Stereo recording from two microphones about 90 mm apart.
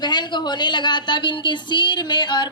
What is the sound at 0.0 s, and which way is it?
A man's voice, 55° left (ahead or behind).